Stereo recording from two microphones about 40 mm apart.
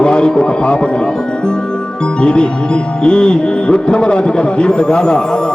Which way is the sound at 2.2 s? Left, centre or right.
Left.